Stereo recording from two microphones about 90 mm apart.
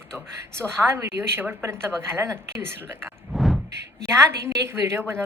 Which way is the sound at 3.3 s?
Centre (ahead or behind).